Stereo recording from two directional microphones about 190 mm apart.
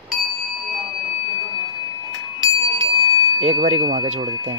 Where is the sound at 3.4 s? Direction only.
35° right (ahead or behind).